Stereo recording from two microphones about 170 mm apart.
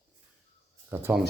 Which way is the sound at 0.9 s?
15° right (ahead or behind).